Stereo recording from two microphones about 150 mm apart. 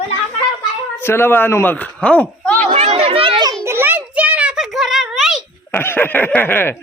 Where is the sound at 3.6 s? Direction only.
15° right (ahead or behind).